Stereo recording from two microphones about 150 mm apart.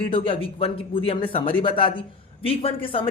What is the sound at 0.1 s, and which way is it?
A woman's voice, 35° left (ahead or behind).